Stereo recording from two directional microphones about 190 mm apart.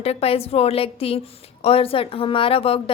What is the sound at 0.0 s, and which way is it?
A woman's voice, 30° left (ahead or behind).